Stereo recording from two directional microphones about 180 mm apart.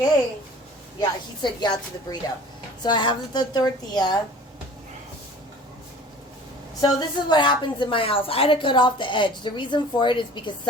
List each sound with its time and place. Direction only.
0.9 s a woman's voice: 25° left (ahead or behind)
6.8 s a woman's voice: 25° left (ahead or behind)